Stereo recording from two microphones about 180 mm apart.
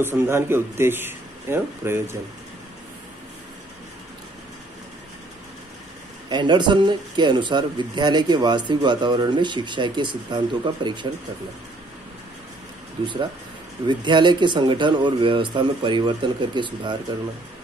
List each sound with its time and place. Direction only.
0.0 s a man's voice: 15° right (ahead or behind)
6.2 s a man's voice: 25° right (ahead or behind)
13.0 s a man's voice: 25° right (ahead or behind)